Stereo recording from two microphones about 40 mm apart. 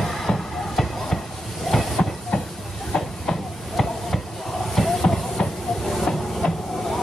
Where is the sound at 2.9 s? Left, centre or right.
Centre.